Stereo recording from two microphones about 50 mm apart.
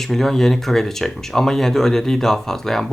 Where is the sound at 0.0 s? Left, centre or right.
Centre.